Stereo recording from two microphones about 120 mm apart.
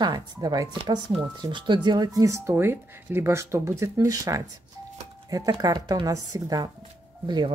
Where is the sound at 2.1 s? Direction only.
25° right (ahead or behind).